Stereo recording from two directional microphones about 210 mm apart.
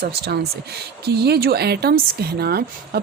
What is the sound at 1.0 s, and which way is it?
A woman's voice, 50° right (ahead or behind).